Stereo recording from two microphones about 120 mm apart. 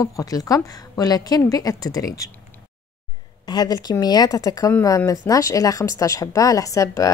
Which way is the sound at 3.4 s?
35° left (ahead or behind).